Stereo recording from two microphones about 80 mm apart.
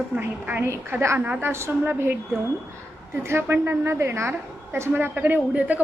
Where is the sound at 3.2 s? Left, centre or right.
Right.